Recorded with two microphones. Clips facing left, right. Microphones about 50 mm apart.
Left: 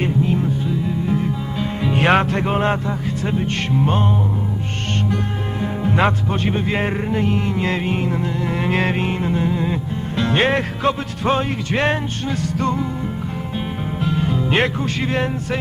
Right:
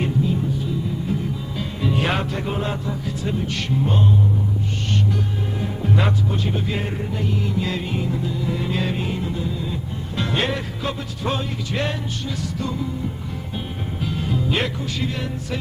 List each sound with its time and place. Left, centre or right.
1.9 s music: left
3.2 s a man's voice: left
5.9 s a man's voice: left
12.5 s music: left
14.5 s a man's voice: left